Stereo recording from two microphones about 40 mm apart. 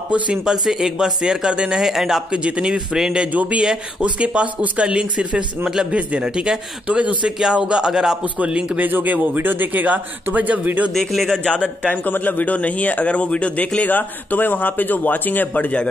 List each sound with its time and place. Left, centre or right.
0.5 s speech: centre
1.8 s speech: centre
2.3 s speech: right
3.3 s speech: right; by 6.6 s centre
6.9 s speech: right; by 8.2 s centre
8.4 s speech: right
8.7 s speech: right
10.9 s a man's voice: centre
11.3 s a man's voice: left
13.8 s speech: left